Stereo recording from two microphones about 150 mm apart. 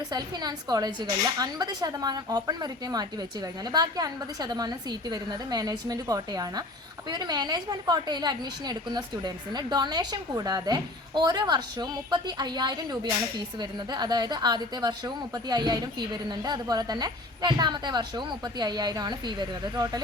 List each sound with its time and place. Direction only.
0.1 s a woman's voice: 25° right (ahead or behind)